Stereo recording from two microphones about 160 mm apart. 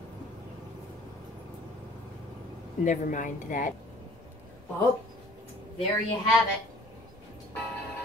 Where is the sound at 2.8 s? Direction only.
55° left (ahead or behind).